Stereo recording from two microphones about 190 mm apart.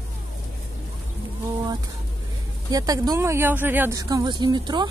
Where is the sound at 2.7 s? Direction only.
20° right (ahead or behind).